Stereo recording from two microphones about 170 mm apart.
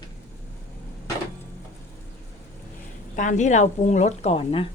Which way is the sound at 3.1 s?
45° left (ahead or behind).